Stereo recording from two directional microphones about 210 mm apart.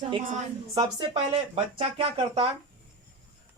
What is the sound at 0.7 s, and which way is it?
Speech, 20° right (ahead or behind).